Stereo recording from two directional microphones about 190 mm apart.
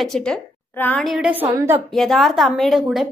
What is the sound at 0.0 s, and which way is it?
A woman's voice, 5° left (ahead or behind).